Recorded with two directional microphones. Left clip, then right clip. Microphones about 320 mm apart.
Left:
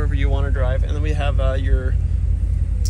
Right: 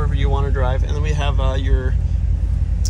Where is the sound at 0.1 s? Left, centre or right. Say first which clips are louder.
Right 3 dB; centre.